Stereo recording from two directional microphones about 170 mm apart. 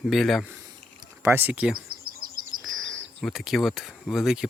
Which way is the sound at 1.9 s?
60° right (ahead or behind).